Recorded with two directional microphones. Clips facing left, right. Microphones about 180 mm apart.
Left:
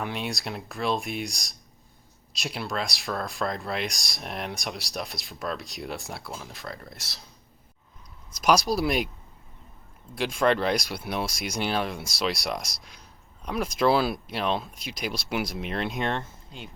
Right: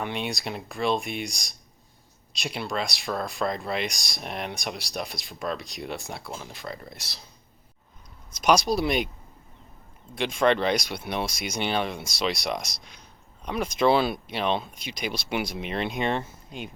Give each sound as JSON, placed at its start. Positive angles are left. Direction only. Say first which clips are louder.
{"t": 0.0, "sound": "speech", "louder": "right 1 dB", "side_deg": 0}
{"t": 8.3, "sound": "speech", "louder": "right 1 dB", "side_deg": 0}
{"t": 10.2, "sound": "speech", "louder": "right 1 dB", "side_deg": 0}
{"t": 16.5, "sound": "speech", "louder": "right 5 dB", "side_deg": -15}